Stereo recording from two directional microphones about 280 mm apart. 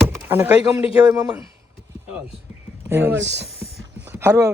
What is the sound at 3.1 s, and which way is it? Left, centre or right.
Speech, right.